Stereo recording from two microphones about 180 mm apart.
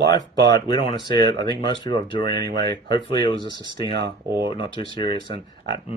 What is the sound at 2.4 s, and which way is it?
Speech, 60° right (ahead or behind).